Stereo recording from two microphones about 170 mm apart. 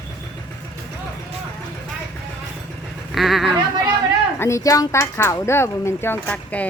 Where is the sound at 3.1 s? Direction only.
Centre (ahead or behind).